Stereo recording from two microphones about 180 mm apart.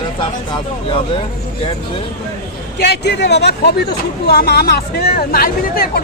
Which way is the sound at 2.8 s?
70° left (ahead or behind).